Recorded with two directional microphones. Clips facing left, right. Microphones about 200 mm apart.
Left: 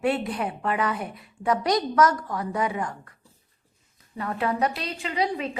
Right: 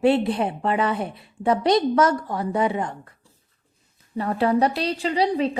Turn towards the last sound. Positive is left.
turn(degrees=-30)  # may be behind; listen again after turning